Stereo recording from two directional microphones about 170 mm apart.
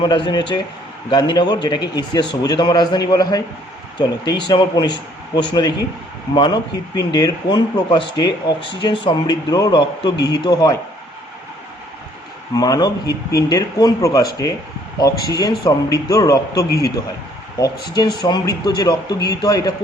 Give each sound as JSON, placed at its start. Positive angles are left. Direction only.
{"t": 0.0, "sound": "a man's voice", "side_deg": 25}
{"t": 12.5, "sound": "a man's voice", "side_deg": 20}